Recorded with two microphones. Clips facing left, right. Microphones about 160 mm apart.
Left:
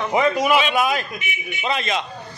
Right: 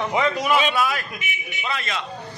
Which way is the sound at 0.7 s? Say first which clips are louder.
Left 3 dB; 20° left (ahead or behind).